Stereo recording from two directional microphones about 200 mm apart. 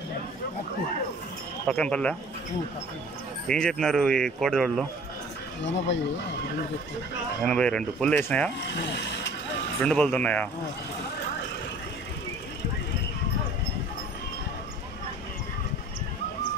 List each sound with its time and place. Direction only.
1.7 s speech: 5° left (ahead or behind)
3.4 s speech: 5° left (ahead or behind)
5.6 s speech: 65° left (ahead or behind)
7.4 s speech: 5° left (ahead or behind)
8.6 s speech: 60° left (ahead or behind)
9.8 s speech: 5° left (ahead or behind)